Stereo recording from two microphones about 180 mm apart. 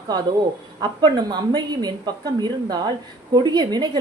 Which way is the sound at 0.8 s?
25° right (ahead or behind).